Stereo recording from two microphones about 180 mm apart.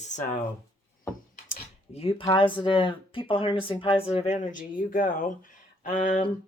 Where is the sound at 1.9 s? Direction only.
30° left (ahead or behind).